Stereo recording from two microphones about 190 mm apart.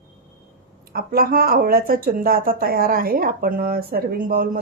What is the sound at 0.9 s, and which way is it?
Speech, 50° right (ahead or behind).